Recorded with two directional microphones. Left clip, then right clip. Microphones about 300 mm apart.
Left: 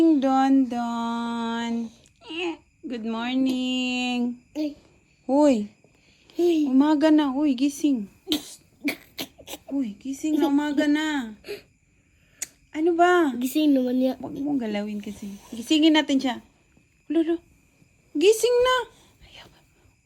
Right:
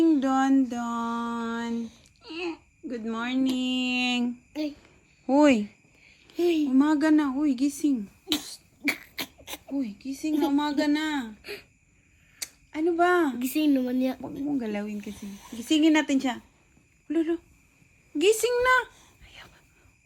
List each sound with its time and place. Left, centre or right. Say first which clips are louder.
0.0 s speech: left 3 dB; centre
5.2 s speech: left 1 dB; centre
12.7 s speech: left 4 dB; centre
18.2 s a sound: left 4 dB; centre